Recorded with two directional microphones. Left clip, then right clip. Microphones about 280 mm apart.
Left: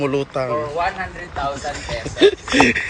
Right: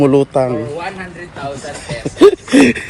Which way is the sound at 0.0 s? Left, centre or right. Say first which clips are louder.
Right 9 dB; centre.